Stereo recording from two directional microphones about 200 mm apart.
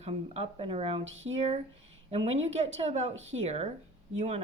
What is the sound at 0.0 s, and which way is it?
Speech, 30° right (ahead or behind).